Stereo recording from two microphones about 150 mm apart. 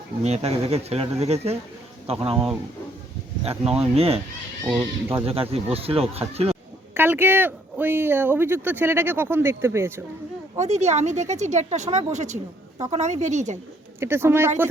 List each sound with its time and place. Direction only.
0.2 s speech: 45° right (ahead or behind)
3.7 s speech: 40° right (ahead or behind)
4.8 s speech: 15° right (ahead or behind)
5.2 s speech: 40° right (ahead or behind)
6.9 s speech: 15° right (ahead or behind)
10.6 s speech: 50° right (ahead or behind)
14.0 s speech: 15° right (ahead or behind)